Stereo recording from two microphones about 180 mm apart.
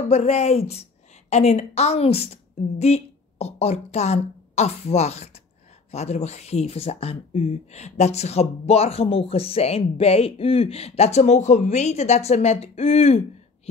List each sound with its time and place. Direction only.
0.1 s a woman's voice: 40° left (ahead or behind)